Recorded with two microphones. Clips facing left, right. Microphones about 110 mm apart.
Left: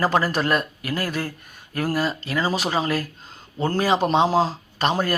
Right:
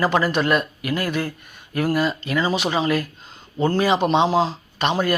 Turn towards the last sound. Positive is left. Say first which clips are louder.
# right 1 dB
turn(degrees=40)  # may be behind; listen again after turning